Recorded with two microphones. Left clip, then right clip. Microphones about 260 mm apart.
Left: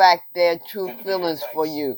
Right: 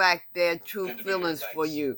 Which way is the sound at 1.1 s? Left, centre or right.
Right.